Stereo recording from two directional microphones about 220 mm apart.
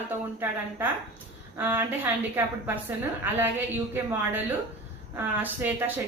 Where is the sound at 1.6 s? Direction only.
10° right (ahead or behind).